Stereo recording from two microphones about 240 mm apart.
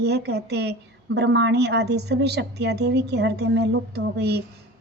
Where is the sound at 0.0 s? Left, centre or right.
Right.